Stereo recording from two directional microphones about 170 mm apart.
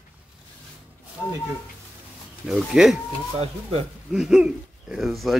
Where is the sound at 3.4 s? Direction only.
35° right (ahead or behind).